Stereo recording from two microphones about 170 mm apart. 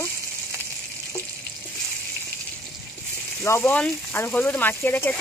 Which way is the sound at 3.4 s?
15° left (ahead or behind).